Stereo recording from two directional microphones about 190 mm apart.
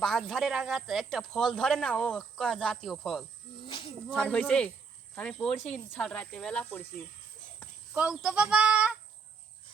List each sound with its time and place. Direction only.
0.0 s speech: centre (ahead or behind)
3.7 s snake: 25° left (ahead or behind)
4.1 s speech: 5° left (ahead or behind)
7.9 s speech: 5° right (ahead or behind)